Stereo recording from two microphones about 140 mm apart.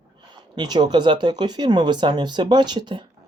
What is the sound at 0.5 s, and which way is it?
Speech, 30° right (ahead or behind).